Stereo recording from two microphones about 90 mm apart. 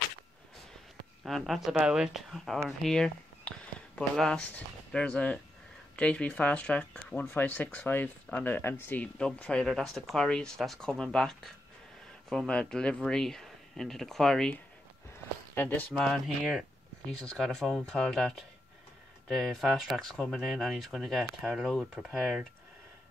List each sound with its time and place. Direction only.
1.2 s speech: centre (ahead or behind)
2.8 s a sound: 5° left (ahead or behind)
4.2 s speech: 10° left (ahead or behind)
9.7 s speech: centre (ahead or behind)
15.5 s speech: 20° left (ahead or behind)
16.0 s speech: 5° left (ahead or behind)